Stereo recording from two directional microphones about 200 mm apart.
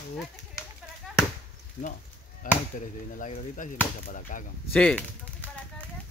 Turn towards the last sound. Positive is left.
turn(degrees=5)  # may be behind; listen again after turning